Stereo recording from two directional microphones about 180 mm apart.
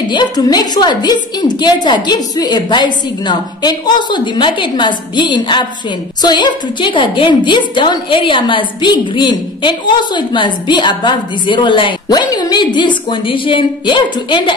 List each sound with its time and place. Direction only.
0.1 s a woman's voice: 25° left (ahead or behind)